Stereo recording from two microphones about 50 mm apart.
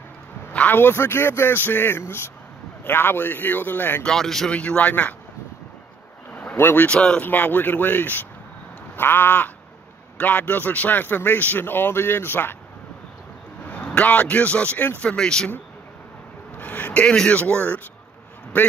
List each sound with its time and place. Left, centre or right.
0.5 s a sound: left
0.7 s a man's voice: left
4.0 s speech: centre
4.5 s speech: left
6.5 s speech: left
6.9 s speech: left
7.2 s a man's voice: left
13.7 s speech: left
15.0 s speech: centre
16.5 s a sound: left
17.3 s a man's voice: left